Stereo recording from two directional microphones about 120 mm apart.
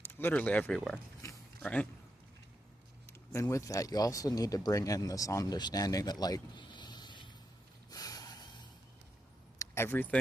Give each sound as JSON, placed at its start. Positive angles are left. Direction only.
{"t": 0.0, "sound": "speech", "side_deg": 20}
{"t": 1.2, "sound": "a sound", "side_deg": 25}
{"t": 1.6, "sound": "speech", "side_deg": 10}
{"t": 3.1, "sound": "speech", "side_deg": 25}
{"t": 7.9, "sound": "snort", "side_deg": 30}
{"t": 9.6, "sound": "a sound", "side_deg": 20}